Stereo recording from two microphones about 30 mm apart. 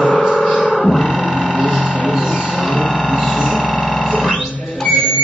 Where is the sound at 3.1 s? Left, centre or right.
Centre.